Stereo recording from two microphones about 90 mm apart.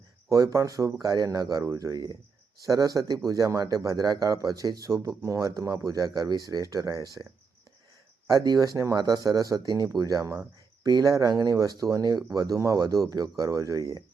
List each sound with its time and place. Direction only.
0.3 s speech: 40° right (ahead or behind)
8.3 s speech: 45° right (ahead or behind)